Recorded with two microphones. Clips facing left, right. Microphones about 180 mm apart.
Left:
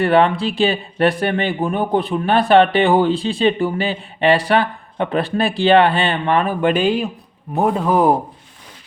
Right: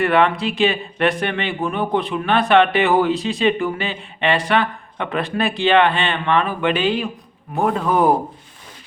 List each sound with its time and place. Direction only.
0.0 s speech: 30° left (ahead or behind)
7.5 s speech: 15° left (ahead or behind)